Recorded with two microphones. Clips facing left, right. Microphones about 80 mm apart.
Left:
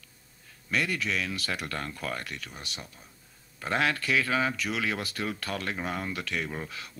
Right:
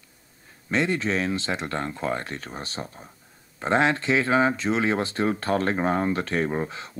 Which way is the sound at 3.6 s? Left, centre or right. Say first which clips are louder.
Right 6 dB; right.